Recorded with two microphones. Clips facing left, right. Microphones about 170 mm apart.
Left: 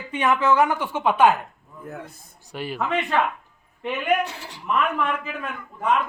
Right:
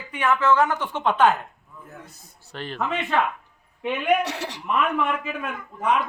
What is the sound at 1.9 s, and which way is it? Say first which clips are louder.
Speech: left 8 dB; 60° left (ahead or behind).